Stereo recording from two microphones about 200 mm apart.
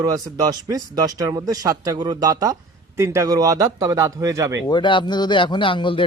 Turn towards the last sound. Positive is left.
turn(degrees=25)  # may be behind; listen again after turning